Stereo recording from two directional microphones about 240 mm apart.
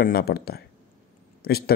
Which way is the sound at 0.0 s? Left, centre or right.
Left.